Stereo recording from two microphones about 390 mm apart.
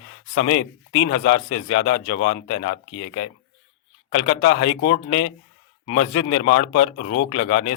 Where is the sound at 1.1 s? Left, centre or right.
Centre.